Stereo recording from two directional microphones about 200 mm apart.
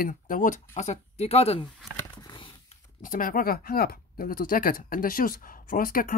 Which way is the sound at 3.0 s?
45° left (ahead or behind).